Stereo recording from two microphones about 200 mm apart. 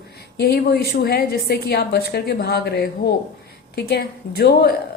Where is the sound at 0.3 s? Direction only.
55° left (ahead or behind).